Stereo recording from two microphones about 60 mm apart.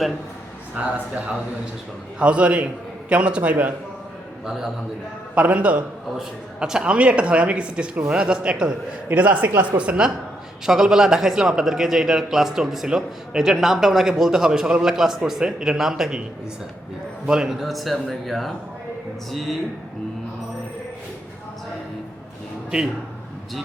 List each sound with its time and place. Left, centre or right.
2.1 s a woman's voice: centre
4.4 s a man's voice: centre
5.3 s a woman's voice: right
6.1 s a man's voice: centre
10.7 s a man's voice: centre
17.2 s a man's voice: centre